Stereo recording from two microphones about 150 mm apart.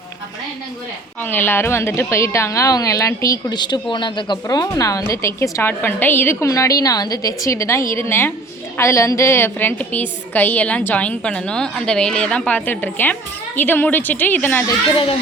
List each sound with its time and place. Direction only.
1.2 s a woman's voice: 15° left (ahead or behind)
14.9 s a child's voice: 40° left (ahead or behind)